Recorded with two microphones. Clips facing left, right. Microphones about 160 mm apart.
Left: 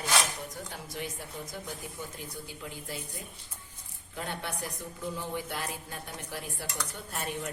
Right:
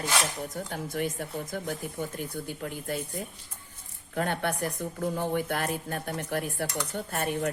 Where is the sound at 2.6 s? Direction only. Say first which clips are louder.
Right 7 dB; 55° right (ahead or behind).